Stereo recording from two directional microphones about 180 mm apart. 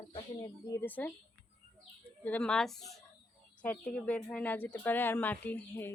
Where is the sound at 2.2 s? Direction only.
5° left (ahead or behind).